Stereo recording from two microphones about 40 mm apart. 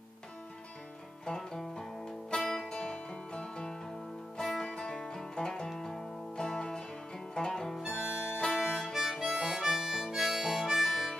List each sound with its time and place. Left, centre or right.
1.2 s music: centre
2.7 s music: left
4.4 s music: centre
4.6 s music: left
7.7 s harmonica: centre
8.5 s harmonica: centre